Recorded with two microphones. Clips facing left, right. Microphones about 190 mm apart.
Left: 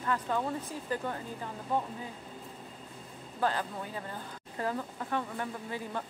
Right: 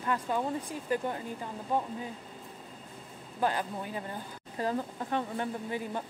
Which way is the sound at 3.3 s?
15° right (ahead or behind).